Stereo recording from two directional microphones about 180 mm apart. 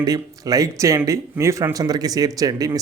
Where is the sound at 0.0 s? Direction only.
20° right (ahead or behind).